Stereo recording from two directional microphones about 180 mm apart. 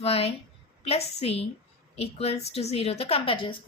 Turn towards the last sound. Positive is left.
turn(degrees=30)  # may be behind; listen again after turning